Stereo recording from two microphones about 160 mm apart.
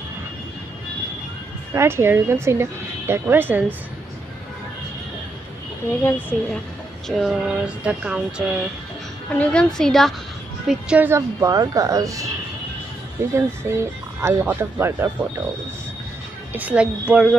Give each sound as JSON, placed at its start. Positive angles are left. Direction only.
{"t": 1.7, "sound": "speech", "side_deg": -15}
{"t": 5.9, "sound": "speech", "side_deg": 15}
{"t": 7.1, "sound": "a sound", "side_deg": 0}
{"t": 9.3, "sound": "a sound", "side_deg": 5}
{"t": 10.7, "sound": "a woman's voice", "side_deg": -10}
{"t": 13.7, "sound": "speech", "side_deg": -15}
{"t": 16.5, "sound": "speech", "side_deg": -10}